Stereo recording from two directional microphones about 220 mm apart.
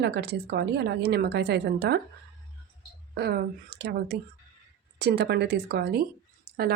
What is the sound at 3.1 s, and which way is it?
Speech, 45° right (ahead or behind).